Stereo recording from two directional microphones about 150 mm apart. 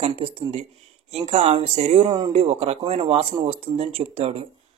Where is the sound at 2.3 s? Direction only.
45° right (ahead or behind).